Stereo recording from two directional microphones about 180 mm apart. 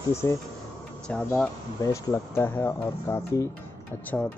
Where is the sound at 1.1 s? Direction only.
5° left (ahead or behind).